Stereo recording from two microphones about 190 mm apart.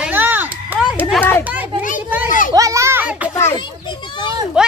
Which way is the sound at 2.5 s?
15° right (ahead or behind).